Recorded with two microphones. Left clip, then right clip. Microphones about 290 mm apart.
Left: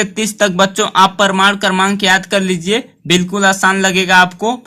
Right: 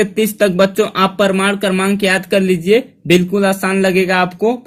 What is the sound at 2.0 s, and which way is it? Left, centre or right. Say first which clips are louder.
Speech: left 2 dB; left.